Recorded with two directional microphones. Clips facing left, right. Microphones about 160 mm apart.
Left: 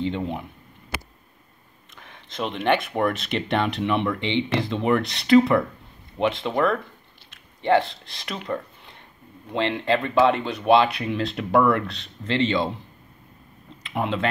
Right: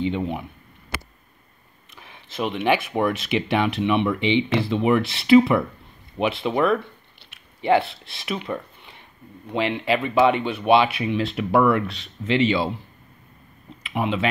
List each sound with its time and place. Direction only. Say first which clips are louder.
0.0 s speech: right 2 dB; 5° right (ahead or behind)
2.0 s speech: right 2 dB; 10° right (ahead or behind)
13.8 s speech: right 1 dB; 5° right (ahead or behind)